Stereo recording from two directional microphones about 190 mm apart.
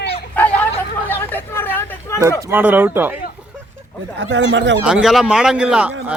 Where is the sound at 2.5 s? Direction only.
10° right (ahead or behind).